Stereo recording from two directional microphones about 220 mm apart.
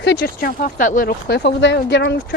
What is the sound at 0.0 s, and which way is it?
Speech, 50° left (ahead or behind).